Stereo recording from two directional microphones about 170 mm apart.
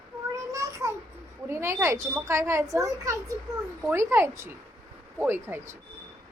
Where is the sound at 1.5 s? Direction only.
15° right (ahead or behind).